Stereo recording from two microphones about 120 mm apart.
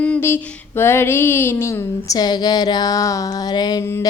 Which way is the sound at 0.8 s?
20° left (ahead or behind).